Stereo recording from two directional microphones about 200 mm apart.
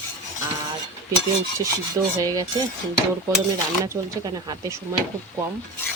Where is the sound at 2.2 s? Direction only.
20° right (ahead or behind).